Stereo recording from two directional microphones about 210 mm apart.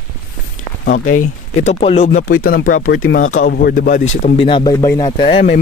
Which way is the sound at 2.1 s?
45° left (ahead or behind).